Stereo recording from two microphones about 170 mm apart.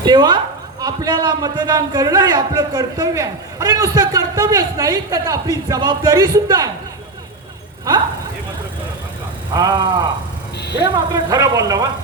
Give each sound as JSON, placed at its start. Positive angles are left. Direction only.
{"t": 0.0, "sound": "a sound", "side_deg": -25}
{"t": 0.8, "sound": "a man's voice", "side_deg": -25}
{"t": 9.5, "sound": "a man's voice", "side_deg": -25}